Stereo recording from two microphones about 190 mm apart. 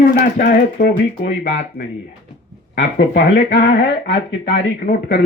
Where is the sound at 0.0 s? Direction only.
45° left (ahead or behind).